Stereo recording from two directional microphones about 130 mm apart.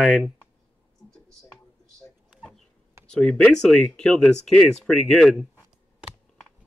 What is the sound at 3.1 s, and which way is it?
Speech, 5° left (ahead or behind).